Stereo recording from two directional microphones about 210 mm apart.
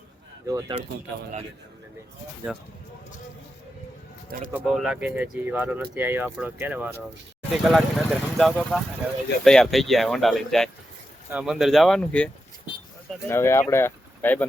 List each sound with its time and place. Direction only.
0.4 s speech: 15° right (ahead or behind)
4.5 s speech: centre (ahead or behind)